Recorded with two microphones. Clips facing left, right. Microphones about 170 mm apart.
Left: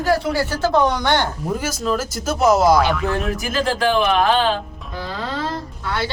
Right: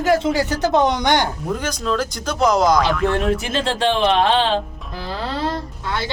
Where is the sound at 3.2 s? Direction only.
30° right (ahead or behind).